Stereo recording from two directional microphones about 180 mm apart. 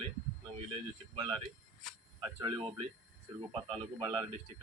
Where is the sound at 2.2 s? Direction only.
20° right (ahead or behind).